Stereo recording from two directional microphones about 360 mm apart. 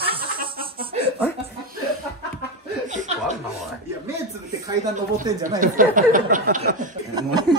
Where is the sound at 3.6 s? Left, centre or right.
Centre.